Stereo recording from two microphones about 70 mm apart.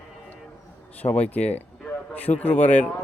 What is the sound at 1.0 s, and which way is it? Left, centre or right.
Speech, left.